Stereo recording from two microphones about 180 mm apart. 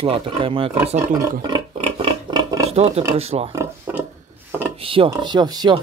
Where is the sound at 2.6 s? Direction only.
35° right (ahead or behind).